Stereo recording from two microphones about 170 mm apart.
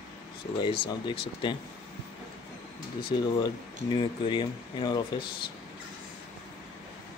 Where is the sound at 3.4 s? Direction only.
25° left (ahead or behind).